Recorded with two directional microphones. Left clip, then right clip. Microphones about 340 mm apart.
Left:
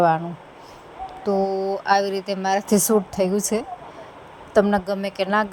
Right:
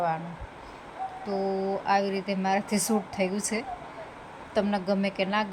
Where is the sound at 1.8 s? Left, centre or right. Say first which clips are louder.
Left 7 dB; centre.